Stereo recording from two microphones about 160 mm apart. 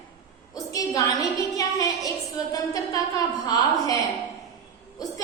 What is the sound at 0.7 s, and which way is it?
A woman's voice, 20° left (ahead or behind).